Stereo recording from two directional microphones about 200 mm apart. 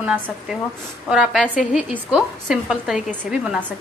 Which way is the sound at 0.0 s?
5° right (ahead or behind).